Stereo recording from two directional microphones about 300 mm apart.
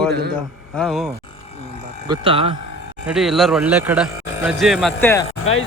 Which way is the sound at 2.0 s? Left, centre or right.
Centre.